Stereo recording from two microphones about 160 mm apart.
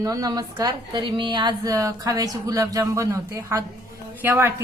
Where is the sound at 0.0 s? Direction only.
25° right (ahead or behind).